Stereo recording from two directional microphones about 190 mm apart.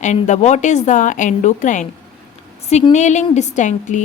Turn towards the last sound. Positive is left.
turn(degrees=40)  # may be behind; listen again after turning